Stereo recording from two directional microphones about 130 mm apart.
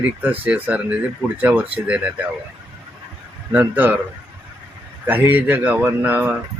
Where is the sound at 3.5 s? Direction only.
15° right (ahead or behind).